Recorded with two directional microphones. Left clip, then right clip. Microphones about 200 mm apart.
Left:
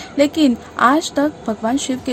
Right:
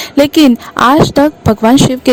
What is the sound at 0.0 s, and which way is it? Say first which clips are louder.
Speech: right 7 dB; 50° right (ahead or behind).